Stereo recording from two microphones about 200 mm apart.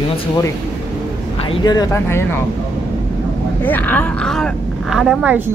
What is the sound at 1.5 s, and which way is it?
Speech, 20° left (ahead or behind).